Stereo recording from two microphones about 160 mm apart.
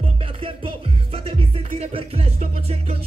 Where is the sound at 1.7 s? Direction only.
40° right (ahead or behind).